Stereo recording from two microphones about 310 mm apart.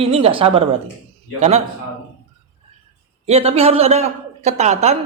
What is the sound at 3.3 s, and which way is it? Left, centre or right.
Speech, centre.